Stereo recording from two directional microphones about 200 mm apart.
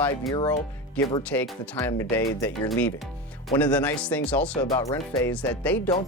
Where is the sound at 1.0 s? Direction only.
5° left (ahead or behind).